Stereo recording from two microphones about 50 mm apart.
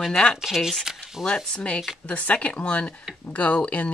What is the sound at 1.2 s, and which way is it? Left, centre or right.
Speech, centre.